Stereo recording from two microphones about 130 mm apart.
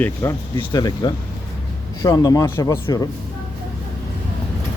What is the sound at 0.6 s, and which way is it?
Speech, 30° left (ahead or behind).